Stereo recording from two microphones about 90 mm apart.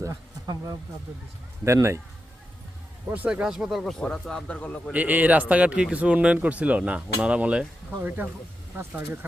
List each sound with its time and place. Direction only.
0.0 s a sound: 40° right (ahead or behind)
1.6 s speech: 30° right (ahead or behind)
3.1 s a man's voice: 15° right (ahead or behind); by 4.8 s 15° left (ahead or behind)
4.9 s speech: 15° right (ahead or behind)